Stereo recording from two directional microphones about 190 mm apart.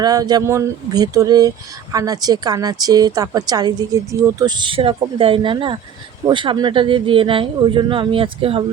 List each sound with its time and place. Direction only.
0.0 s speech: 20° right (ahead or behind)